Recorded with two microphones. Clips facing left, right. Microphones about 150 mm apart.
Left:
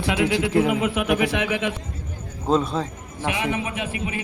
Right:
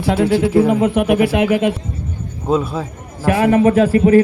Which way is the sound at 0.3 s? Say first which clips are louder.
Right 8 dB; 5° right (ahead or behind).